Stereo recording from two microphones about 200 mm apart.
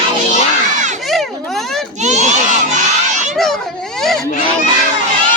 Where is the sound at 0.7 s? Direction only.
35° right (ahead or behind).